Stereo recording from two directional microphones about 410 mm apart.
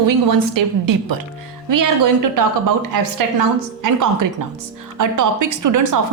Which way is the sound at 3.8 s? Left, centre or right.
Right.